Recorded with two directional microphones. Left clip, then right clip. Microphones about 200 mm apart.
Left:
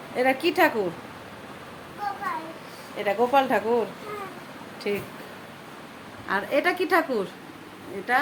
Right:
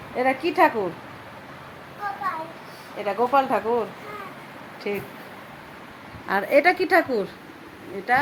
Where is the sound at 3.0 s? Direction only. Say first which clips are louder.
Right 1 dB; centre (ahead or behind).